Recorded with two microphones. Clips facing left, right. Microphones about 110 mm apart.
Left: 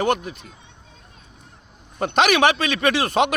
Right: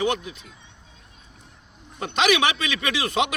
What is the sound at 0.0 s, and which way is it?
Speech, 55° left (ahead or behind).